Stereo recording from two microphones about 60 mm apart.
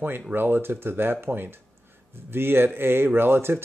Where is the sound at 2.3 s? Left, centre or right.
Right.